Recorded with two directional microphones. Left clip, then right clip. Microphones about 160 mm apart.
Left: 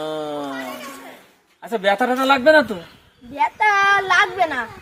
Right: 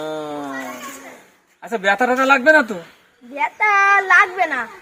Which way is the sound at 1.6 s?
Centre (ahead or behind).